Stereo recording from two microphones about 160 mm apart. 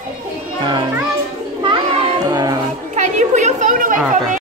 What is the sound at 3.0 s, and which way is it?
Children playing, 45° right (ahead or behind).